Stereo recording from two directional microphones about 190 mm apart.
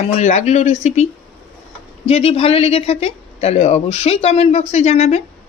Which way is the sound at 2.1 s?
30° left (ahead or behind).